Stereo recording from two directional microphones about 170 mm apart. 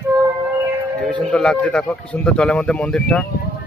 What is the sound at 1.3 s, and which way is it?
A man's voice, 5° left (ahead or behind).